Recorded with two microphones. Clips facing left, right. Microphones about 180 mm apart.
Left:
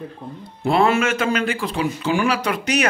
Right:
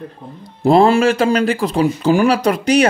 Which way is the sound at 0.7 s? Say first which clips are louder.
Right 6 dB; 35° right (ahead or behind).